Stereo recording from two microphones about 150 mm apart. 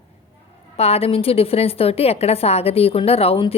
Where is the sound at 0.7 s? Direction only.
45° left (ahead or behind).